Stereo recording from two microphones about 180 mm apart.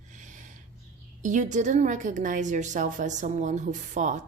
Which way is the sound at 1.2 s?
45° right (ahead or behind).